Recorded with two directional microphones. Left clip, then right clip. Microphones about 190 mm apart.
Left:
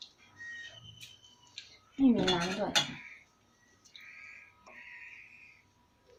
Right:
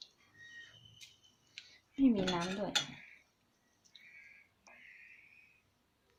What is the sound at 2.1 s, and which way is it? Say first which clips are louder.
Speech: left 5 dB; 25° right (ahead or behind).